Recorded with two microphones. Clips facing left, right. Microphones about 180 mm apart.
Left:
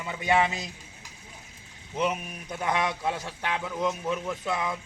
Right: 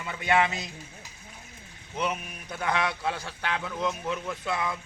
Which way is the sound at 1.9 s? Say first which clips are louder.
Left 3 dB; 20° left (ahead or behind).